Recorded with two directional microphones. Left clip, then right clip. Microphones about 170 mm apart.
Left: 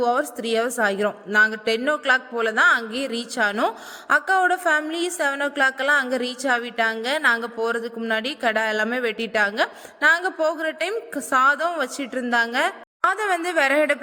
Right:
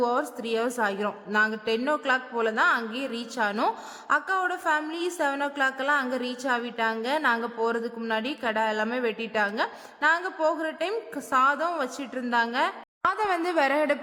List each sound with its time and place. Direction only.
0.0 s a woman's voice: 20° left (ahead or behind)